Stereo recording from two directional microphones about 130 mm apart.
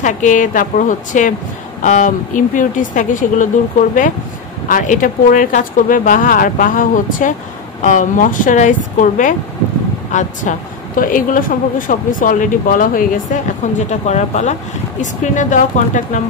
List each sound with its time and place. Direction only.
0.0 s speech: 75° left (ahead or behind)
1.8 s speech: 65° left (ahead or behind); by 3.4 s 85° left
4.6 s speech: 85° left
7.8 s speech: 75° left (ahead or behind)
11.0 s speech: 90° left; by 14.5 s 60° left (ahead or behind)
15.0 s speech: 75° left (ahead or behind)